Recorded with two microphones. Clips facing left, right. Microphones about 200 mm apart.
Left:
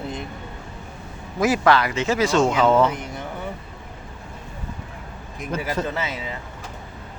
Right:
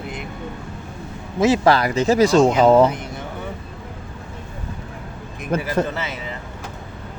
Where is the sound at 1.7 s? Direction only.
35° right (ahead or behind).